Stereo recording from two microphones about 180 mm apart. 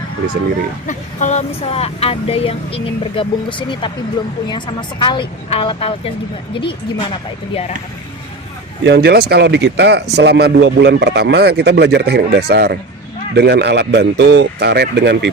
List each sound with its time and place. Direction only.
0.9 s speech: 40° left (ahead or behind)
8.8 s a man's voice: 65° right (ahead or behind)